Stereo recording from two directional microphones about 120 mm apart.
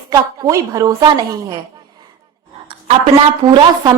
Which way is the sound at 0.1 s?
25° right (ahead or behind).